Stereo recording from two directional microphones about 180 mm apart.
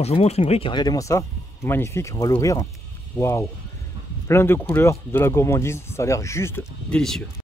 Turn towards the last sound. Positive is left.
turn(degrees=5)  # may be behind; listen again after turning